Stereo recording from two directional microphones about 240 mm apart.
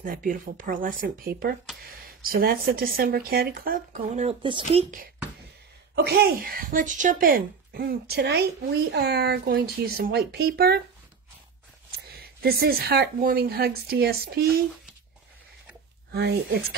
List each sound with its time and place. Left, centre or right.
0.0 s speech: right
5.9 s speech: right
12.1 s speech: right
16.1 s speech: right